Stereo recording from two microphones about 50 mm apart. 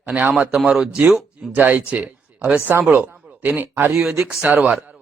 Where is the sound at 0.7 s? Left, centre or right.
Centre.